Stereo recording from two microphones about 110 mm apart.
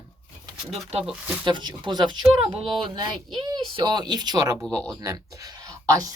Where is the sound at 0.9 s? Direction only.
70° right (ahead or behind).